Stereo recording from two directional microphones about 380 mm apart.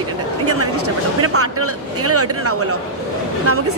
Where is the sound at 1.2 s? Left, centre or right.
Right.